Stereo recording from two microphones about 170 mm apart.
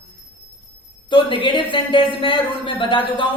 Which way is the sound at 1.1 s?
30° left (ahead or behind).